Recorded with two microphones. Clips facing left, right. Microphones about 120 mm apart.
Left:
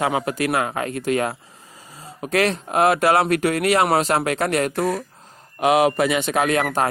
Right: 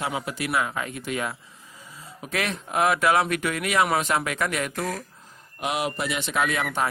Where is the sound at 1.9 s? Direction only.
70° left (ahead or behind).